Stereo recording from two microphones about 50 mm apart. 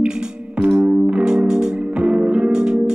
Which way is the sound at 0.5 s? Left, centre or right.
Right.